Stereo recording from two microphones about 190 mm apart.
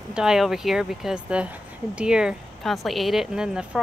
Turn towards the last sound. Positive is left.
turn(degrees=-5)  # may be behind; listen again after turning